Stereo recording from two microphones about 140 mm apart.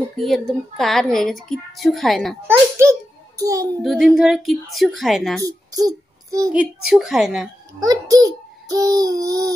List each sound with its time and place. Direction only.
0.2 s a woman's voice: centre (ahead or behind)
2.4 s a child's voice: 20° right (ahead or behind)
3.8 s a woman's voice: 5° right (ahead or behind)
5.4 s a sound: 25° right (ahead or behind)
6.5 s a woman's voice: 5° right (ahead or behind)
7.8 s a sound: 25° right (ahead or behind)